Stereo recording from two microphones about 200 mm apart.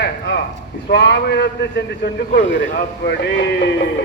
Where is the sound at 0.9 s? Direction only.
55° left (ahead or behind).